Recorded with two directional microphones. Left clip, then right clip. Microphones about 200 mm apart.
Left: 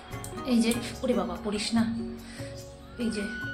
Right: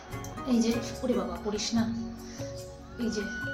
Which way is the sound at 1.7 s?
30° left (ahead or behind).